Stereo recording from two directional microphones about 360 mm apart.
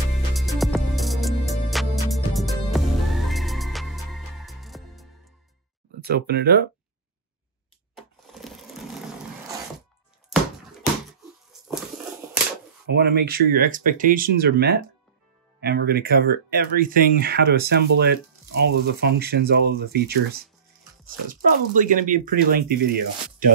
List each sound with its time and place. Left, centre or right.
0.3 s music: centre
6.0 s speech: right
7.9 s a sound: centre
12.8 s speech: right